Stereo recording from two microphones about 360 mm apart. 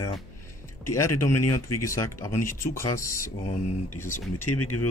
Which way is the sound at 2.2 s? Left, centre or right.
Centre.